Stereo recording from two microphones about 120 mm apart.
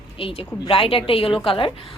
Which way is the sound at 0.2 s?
50° left (ahead or behind).